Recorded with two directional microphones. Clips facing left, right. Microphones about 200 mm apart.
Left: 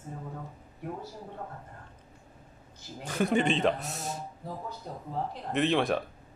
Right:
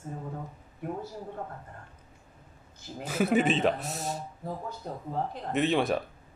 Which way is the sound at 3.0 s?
5° right (ahead or behind).